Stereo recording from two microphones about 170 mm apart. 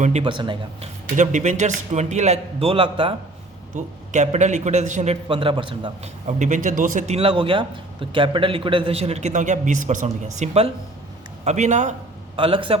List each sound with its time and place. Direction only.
0.0 s a man's voice: 40° right (ahead or behind)
0.3 s speech: 30° right (ahead or behind)
1.1 s a man's voice: 45° right (ahead or behind)
3.8 s a man's voice: 45° right (ahead or behind)
5.3 s a man's voice: 30° right (ahead or behind)
6.2 s a man's voice: 45° right (ahead or behind)
7.2 s a man's voice: 30° right (ahead or behind)
12.4 s a man's voice: 30° right (ahead or behind)